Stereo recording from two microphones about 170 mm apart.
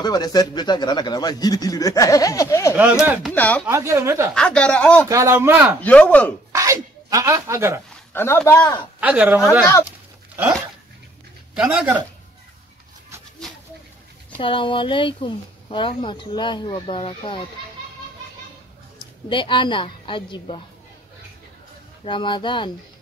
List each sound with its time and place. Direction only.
0.0 s speech: 25° left (ahead or behind)
3.6 s speech: 15° right (ahead or behind)
4.3 s speech: 5° left (ahead or behind)
5.0 s speech: 15° right (ahead or behind)
5.8 s speech: 10° left (ahead or behind)
6.5 s zipper: 20° right (ahead or behind)
7.9 s a man's voice: 15° left (ahead or behind)
9.0 s speech: 10° right (ahead or behind)
11.5 s speech: 5° right (ahead or behind)
13.4 s a sound: centre (ahead or behind)
14.4 s speech: 30° left (ahead or behind)
19.2 s speech: 30° left (ahead or behind)
22.0 s speech: 30° left (ahead or behind)